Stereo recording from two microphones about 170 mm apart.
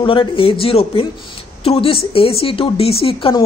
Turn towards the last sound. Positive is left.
turn(degrees=30)  # may be behind; listen again after turning